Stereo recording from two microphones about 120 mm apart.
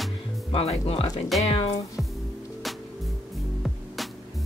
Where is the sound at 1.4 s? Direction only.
50° left (ahead or behind).